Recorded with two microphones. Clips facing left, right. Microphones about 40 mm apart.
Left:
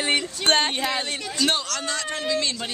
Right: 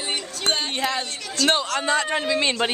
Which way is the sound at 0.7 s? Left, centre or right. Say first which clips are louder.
Even; centre.